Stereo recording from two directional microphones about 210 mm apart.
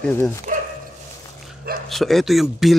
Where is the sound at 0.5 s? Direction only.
35° right (ahead or behind).